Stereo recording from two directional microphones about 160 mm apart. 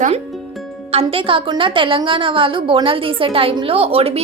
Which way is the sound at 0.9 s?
35° right (ahead or behind).